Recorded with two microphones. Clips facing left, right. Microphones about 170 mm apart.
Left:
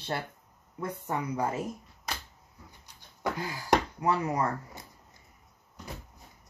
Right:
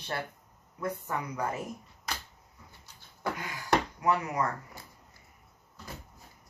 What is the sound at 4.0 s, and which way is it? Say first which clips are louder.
Speech: left 1 dB; 30° left (ahead or behind).